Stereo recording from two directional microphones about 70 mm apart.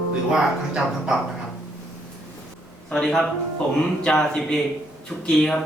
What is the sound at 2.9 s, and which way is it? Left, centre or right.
A man's voice, centre.